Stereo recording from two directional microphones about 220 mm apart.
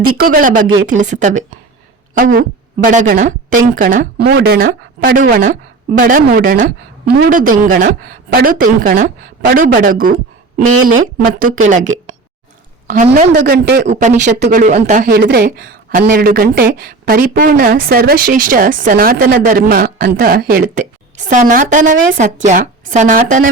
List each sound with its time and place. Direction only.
0.2 s speech: 40° right (ahead or behind)
12.9 s a woman's voice: 35° right (ahead or behind)
13.8 s speech: 30° right (ahead or behind)